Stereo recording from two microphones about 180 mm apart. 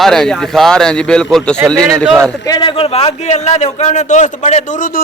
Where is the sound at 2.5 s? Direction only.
30° left (ahead or behind).